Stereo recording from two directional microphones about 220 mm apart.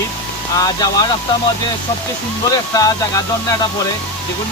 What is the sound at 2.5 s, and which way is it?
Speech, 15° left (ahead or behind).